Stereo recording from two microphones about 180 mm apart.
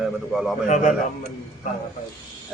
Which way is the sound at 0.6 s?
40° left (ahead or behind).